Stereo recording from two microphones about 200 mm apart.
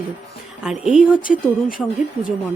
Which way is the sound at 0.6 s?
5° right (ahead or behind).